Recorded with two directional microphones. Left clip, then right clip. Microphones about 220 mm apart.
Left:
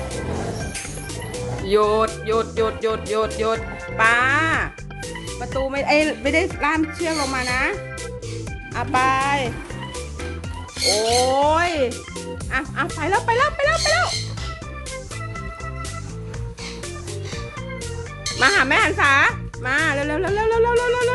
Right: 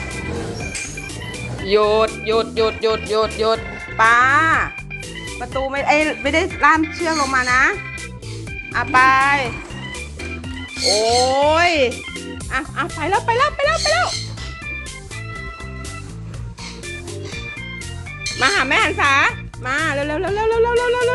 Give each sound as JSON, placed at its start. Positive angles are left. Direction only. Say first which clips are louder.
{"t": 1.6, "sound": "music", "louder": "right 3 dB", "side_deg": 0}
{"t": 5.4, "sound": "speech", "louder": "right 2 dB", "side_deg": 15}
{"t": 8.7, "sound": "speech", "louder": "right 6 dB", "side_deg": 20}
{"t": 10.8, "sound": "music", "louder": "right 2 dB", "side_deg": 0}
{"t": 18.3, "sound": "music", "louder": "even", "side_deg": 5}